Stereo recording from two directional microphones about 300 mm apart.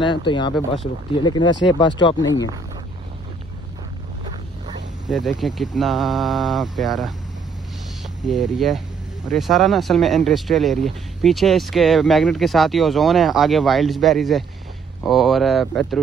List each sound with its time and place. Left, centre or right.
0.0 s speech: centre
5.1 s speech: centre
8.3 s speech: centre